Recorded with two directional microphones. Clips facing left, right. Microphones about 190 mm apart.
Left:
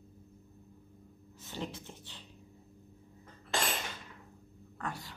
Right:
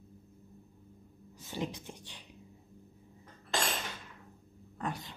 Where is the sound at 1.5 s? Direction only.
15° right (ahead or behind).